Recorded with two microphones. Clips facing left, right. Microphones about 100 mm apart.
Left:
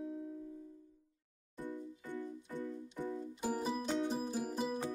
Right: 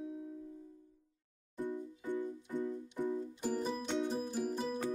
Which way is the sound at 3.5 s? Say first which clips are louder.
Even; 5° left (ahead or behind).